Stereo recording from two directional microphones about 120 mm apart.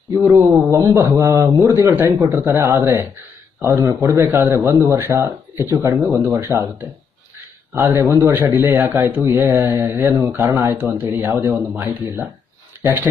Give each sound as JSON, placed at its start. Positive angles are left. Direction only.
{"t": 0.2, "sound": "a man's voice", "side_deg": -25}
{"t": 10.8, "sound": "speech", "side_deg": -15}
{"t": 12.8, "sound": "speech", "side_deg": -15}